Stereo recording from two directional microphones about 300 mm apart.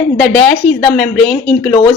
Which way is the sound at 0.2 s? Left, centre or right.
Centre.